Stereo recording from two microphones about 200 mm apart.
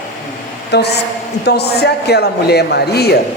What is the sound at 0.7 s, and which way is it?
A woman's voice, 60° left (ahead or behind).